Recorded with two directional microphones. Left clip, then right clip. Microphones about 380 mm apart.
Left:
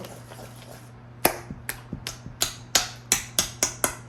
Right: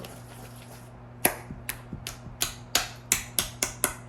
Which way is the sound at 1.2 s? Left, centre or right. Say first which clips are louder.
Left 4 dB; centre.